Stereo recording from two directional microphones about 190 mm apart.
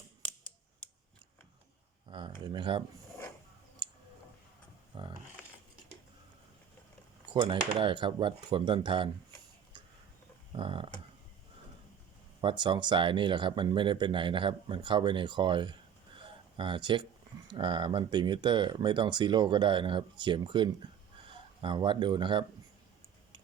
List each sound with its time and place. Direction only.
2.0 s a sound: 25° right (ahead or behind)
2.4 s speech: 25° right (ahead or behind)
3.8 s tick: 25° right (ahead or behind)
4.9 s speech: 25° right (ahead or behind)
7.3 s speech: 25° right (ahead or behind)
10.5 s speech: 25° right (ahead or behind)
12.4 s speech: 25° right (ahead or behind)